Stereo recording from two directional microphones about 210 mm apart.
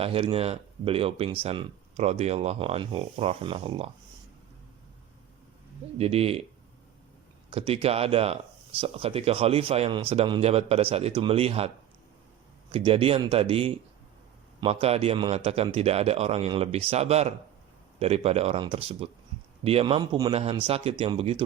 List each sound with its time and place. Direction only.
0.0 s speech: 25° right (ahead or behind)
6.0 s speech: 30° right (ahead or behind)
7.5 s speech: 25° right (ahead or behind)
12.7 s speech: 25° right (ahead or behind)